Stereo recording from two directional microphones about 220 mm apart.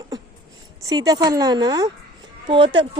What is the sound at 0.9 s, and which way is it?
A woman's voice, 15° right (ahead or behind).